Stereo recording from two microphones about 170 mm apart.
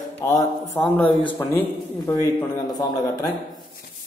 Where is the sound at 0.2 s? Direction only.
20° left (ahead or behind).